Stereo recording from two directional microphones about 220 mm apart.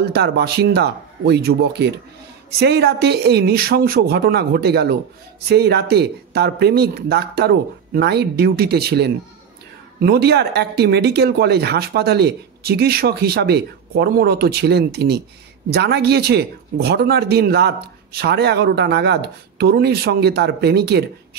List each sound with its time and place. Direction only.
0.0 s speech: 50° right (ahead or behind)